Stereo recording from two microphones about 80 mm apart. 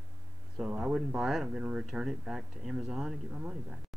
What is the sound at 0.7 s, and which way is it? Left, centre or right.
Speech, centre.